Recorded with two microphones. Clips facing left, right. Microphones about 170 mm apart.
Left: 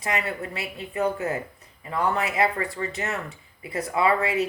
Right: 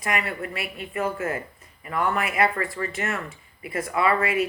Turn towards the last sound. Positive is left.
turn(degrees=20)  # may be behind; listen again after turning